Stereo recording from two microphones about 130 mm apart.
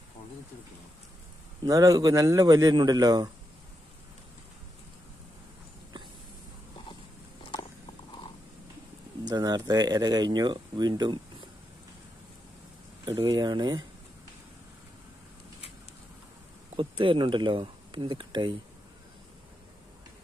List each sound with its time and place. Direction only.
1.6 s a man's voice: 25° right (ahead or behind)
9.2 s speech: 30° right (ahead or behind)
13.0 s speech: 30° right (ahead or behind)
16.7 s speech: 45° right (ahead or behind)